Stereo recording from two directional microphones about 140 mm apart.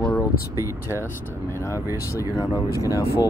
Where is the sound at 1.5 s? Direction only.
20° left (ahead or behind).